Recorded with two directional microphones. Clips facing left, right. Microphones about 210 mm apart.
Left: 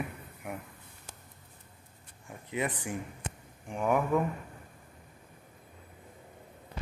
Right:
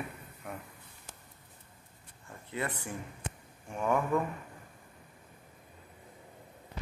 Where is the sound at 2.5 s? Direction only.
15° left (ahead or behind).